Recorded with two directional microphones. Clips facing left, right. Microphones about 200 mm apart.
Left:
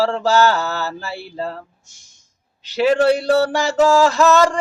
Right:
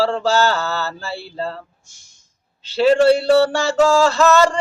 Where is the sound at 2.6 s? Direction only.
15° left (ahead or behind).